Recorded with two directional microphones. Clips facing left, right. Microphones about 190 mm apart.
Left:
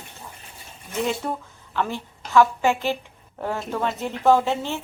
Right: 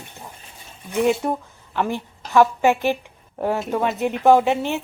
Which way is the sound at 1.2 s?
15° right (ahead or behind).